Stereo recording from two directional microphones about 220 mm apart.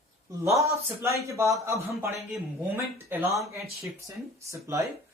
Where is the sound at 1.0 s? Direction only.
15° right (ahead or behind).